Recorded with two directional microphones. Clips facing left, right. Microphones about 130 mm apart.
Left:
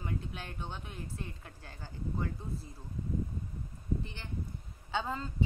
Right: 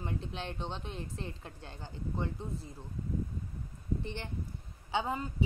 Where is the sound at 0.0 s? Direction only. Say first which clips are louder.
Right 2 dB; 30° right (ahead or behind).